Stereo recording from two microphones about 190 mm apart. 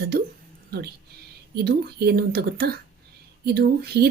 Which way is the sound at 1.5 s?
55° right (ahead or behind).